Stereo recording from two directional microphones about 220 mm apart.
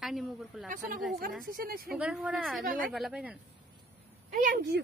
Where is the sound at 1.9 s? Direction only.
5° right (ahead or behind).